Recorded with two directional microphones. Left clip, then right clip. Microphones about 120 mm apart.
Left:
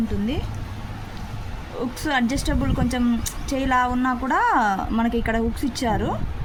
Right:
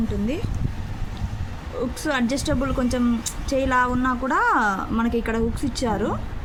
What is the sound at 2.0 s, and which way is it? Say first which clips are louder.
A woman's voice: left 1 dB; 35° left (ahead or behind).